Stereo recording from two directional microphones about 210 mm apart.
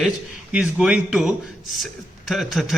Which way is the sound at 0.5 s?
5° right (ahead or behind).